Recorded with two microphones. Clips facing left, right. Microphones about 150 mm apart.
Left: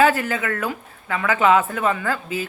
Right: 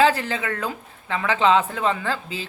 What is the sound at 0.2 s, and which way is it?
Speech, 25° right (ahead or behind).